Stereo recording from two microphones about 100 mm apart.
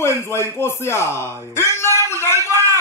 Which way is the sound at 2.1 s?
25° left (ahead or behind).